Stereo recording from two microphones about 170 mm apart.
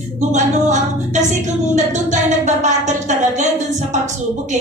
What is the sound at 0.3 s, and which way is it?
A woman's voice, 45° right (ahead or behind).